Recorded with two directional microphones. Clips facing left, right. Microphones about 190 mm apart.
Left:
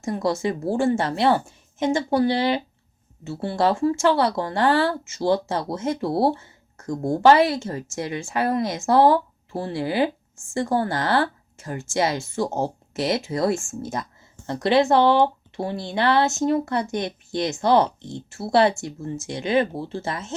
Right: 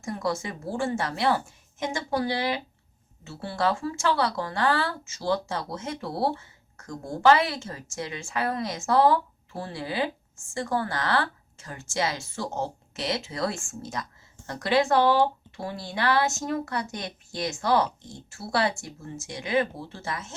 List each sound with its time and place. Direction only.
0.0 s a woman's voice: 25° left (ahead or behind)
5.6 s a woman's voice: 40° left (ahead or behind)
14.4 s a woman's voice: 25° left (ahead or behind)